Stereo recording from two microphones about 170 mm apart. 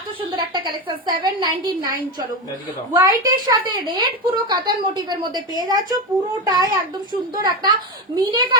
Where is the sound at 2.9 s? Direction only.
20° right (ahead or behind).